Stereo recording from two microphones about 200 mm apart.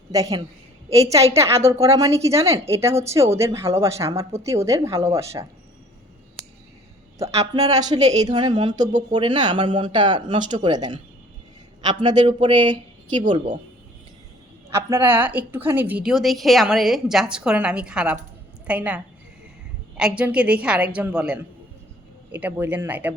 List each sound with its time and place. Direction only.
0.1 s a woman's voice: 15° right (ahead or behind)
7.3 s speech: 20° right (ahead or behind)
14.7 s a woman's voice: 10° right (ahead or behind)